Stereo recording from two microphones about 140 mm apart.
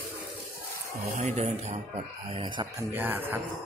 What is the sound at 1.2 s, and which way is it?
Speech, 50° right (ahead or behind).